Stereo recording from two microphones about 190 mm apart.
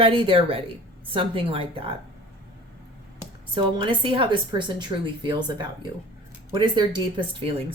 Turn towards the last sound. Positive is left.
turn(degrees=-25)  # may be behind; listen again after turning